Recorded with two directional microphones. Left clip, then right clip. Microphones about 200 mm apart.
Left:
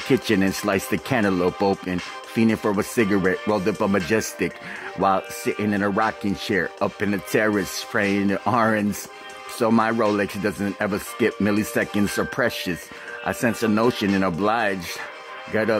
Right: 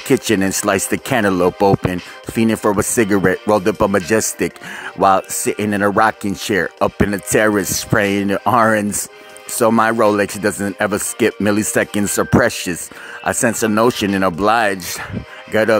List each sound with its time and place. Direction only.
0.1 s speech: 25° right (ahead or behind)